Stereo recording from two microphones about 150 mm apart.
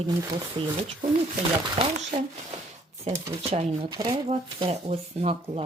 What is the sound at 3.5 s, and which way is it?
Speech, 45° right (ahead or behind).